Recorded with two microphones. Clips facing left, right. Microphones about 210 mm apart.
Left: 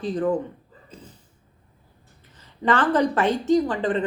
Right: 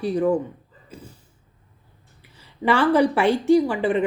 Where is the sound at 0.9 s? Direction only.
10° right (ahead or behind).